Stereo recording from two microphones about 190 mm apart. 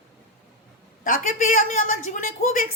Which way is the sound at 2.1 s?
45° left (ahead or behind).